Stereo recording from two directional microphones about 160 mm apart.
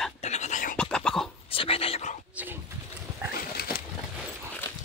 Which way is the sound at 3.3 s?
70° left (ahead or behind).